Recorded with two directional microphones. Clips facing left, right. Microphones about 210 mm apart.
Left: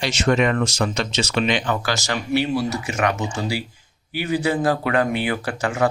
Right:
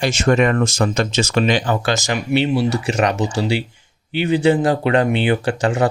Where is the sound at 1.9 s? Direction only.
20° right (ahead or behind).